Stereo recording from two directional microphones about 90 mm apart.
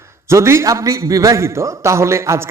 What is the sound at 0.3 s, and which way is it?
A man's voice, 30° right (ahead or behind).